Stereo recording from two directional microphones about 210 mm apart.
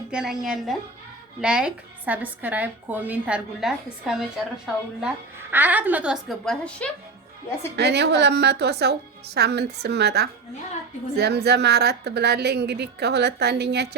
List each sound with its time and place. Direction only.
0.1 s a woman's voice: 5° right (ahead or behind)
7.8 s a woman's voice: 55° right (ahead or behind)